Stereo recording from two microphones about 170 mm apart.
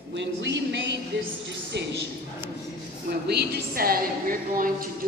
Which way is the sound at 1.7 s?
80° right.